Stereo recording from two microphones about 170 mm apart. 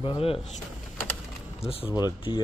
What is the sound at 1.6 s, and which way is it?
Speech, 35° left (ahead or behind).